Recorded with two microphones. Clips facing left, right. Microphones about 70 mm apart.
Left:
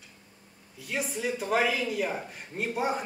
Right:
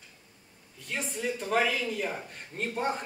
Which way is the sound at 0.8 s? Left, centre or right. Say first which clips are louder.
Left 2 dB; centre.